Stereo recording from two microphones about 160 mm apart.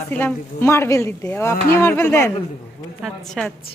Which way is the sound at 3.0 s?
5° left (ahead or behind).